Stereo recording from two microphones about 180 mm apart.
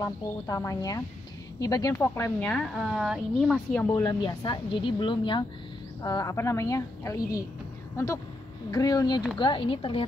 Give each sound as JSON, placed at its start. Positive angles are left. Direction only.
{"t": 0.0, "sound": "a woman's voice", "side_deg": 20}
{"t": 2.0, "sound": "a woman's voice", "side_deg": 5}
{"t": 4.0, "sound": "a woman's voice", "side_deg": 25}